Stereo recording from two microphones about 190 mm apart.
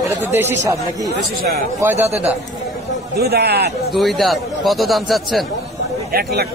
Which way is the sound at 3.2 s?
55° right (ahead or behind).